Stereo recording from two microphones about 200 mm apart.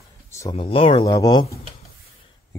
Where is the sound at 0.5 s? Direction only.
30° left (ahead or behind).